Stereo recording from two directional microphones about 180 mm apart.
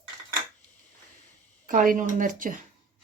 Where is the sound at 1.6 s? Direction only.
50° right (ahead or behind).